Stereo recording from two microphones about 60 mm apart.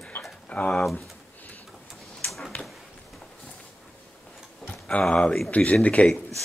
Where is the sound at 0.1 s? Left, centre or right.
Left.